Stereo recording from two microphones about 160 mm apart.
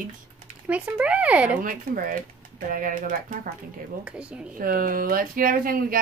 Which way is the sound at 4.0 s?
5° right (ahead or behind).